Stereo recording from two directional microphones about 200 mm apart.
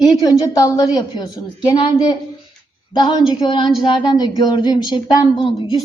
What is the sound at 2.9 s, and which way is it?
A woman's voice, 25° left (ahead or behind).